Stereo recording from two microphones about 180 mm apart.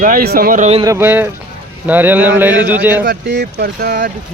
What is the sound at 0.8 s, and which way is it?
A man's voice, 15° right (ahead or behind).